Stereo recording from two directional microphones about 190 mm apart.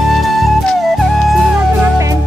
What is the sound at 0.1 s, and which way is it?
Music, centre (ahead or behind).